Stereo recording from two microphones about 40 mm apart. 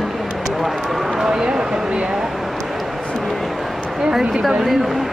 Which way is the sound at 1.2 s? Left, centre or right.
Centre.